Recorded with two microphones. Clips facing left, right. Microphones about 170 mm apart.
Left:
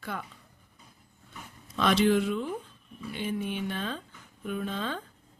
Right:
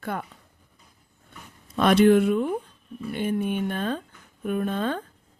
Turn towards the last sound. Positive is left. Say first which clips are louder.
# right 7 dB
turn(degrees=-50)  # may be behind; listen again after turning